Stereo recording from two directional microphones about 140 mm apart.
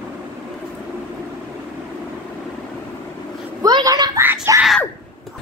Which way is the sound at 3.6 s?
30° right (ahead or behind).